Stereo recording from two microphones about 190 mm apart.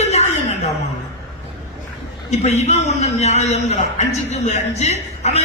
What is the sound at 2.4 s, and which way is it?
A man's voice, 35° left (ahead or behind).